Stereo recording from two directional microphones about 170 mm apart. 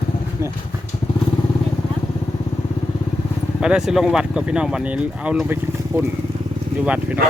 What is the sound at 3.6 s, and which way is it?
Speech, 5° right (ahead or behind).